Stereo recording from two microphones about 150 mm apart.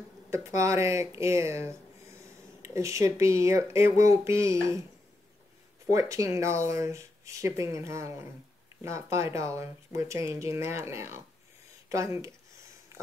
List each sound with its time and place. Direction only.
0.3 s speech: 20° right (ahead or behind)
5.9 s speech: 20° right (ahead or behind)